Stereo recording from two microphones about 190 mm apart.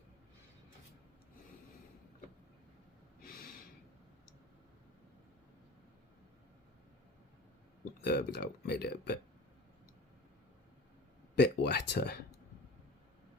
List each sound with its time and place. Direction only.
8.0 s speech: 60° left (ahead or behind)
11.3 s speech: 60° left (ahead or behind)